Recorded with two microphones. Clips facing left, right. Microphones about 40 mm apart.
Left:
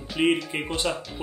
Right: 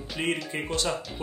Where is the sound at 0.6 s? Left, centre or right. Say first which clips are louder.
Even; left.